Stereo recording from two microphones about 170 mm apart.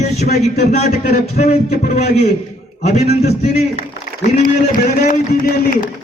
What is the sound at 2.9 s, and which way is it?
Speech, 40° left (ahead or behind).